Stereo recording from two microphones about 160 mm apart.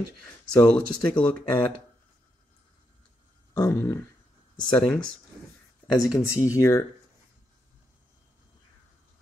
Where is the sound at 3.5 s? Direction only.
20° left (ahead or behind).